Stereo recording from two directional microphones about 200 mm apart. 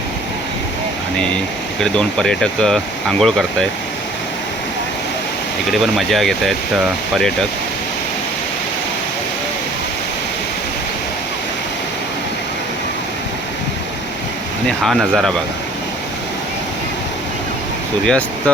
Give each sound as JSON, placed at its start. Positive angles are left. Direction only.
{"t": 1.8, "sound": "speech", "side_deg": 5}
{"t": 5.7, "sound": "speech", "side_deg": 0}
{"t": 14.8, "sound": "speech", "side_deg": 0}
{"t": 18.0, "sound": "speech", "side_deg": 5}